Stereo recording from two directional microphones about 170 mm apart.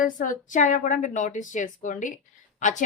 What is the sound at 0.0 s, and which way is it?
Speech, 50° left (ahead or behind).